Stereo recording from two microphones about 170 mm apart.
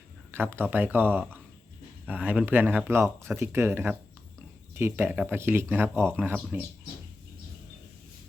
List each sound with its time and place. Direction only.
0.3 s speech: 15° right (ahead or behind)